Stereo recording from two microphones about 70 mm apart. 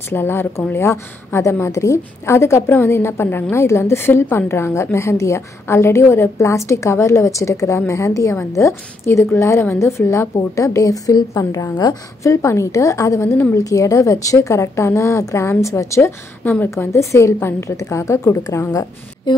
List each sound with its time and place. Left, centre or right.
0.1 s a woman's voice: left
12.2 s a woman's voice: left
18.7 s a woman's voice: left